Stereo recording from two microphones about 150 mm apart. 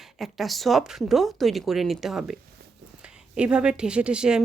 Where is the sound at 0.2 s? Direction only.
Centre (ahead or behind).